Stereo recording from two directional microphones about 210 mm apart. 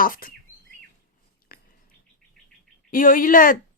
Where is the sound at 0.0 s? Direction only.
40° left (ahead or behind).